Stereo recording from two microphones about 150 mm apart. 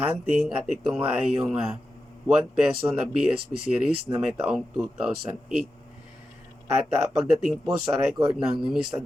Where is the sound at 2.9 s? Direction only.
Centre (ahead or behind).